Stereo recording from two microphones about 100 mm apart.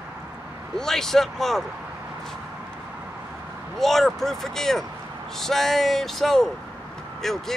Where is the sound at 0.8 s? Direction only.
5° left (ahead or behind).